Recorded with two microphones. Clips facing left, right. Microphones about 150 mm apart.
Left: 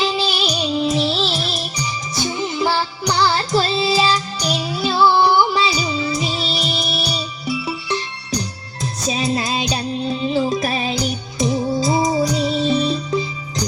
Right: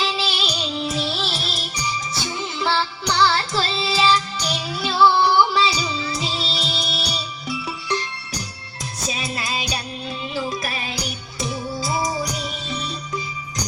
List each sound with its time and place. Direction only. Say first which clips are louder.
0.0 s music: left 5 dB; 20° left (ahead or behind)
9.0 s music: left 8 dB; 35° left (ahead or behind)
11.4 s music: left 8 dB; 40° left (ahead or behind)
11.7 s music: left 7 dB; 20° left (ahead or behind)